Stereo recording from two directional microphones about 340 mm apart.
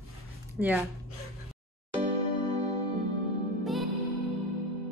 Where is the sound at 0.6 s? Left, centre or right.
Centre.